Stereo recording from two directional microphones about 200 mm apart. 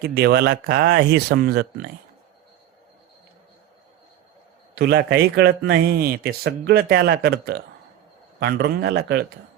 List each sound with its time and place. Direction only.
0.1 s a man's voice: 55° right (ahead or behind)
4.7 s a man's voice: 55° right (ahead or behind)